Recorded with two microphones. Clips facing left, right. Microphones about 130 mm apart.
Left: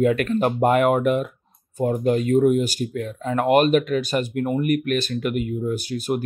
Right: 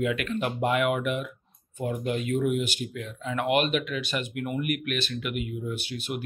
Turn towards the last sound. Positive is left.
turn(degrees=40)  # may be behind; listen again after turning